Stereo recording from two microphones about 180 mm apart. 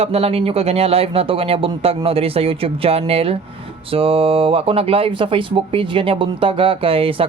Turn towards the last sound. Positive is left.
turn(degrees=-30)  # may be behind; listen again after turning